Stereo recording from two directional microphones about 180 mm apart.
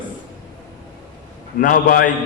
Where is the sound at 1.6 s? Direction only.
50° left (ahead or behind).